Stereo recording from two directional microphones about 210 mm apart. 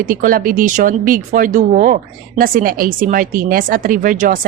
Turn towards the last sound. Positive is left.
turn(degrees=-40)  # may be behind; listen again after turning